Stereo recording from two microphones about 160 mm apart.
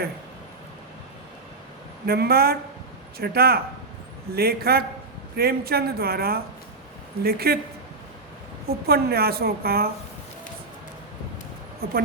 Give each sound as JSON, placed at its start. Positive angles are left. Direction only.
{"t": 2.0, "sound": "a woman's voice", "side_deg": -75}
{"t": 8.6, "sound": "a woman's voice", "side_deg": -75}